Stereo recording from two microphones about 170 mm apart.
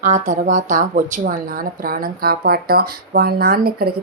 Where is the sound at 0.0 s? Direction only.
45° right (ahead or behind).